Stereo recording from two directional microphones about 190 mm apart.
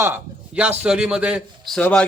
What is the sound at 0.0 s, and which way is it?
A man's voice, 10° right (ahead or behind).